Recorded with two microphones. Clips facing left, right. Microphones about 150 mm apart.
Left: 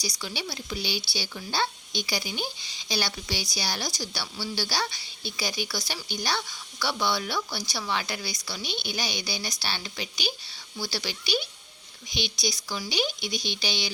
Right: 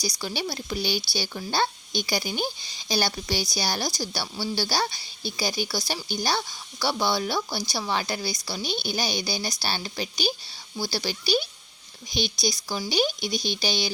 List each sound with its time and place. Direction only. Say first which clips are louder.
0.0 s a woman's voice: right 4 dB; 40° right (ahead or behind)